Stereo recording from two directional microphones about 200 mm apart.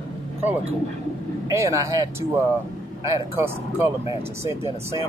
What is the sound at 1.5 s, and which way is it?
Speech, 15° right (ahead or behind).